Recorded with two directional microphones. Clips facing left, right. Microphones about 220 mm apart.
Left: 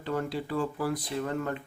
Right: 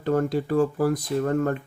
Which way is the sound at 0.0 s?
45° right (ahead or behind).